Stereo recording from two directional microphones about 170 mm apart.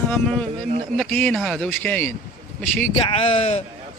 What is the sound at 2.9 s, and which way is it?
Speech, 30° left (ahead or behind).